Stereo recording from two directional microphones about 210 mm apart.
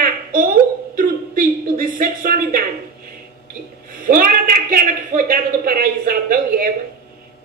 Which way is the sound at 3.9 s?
40° right (ahead or behind).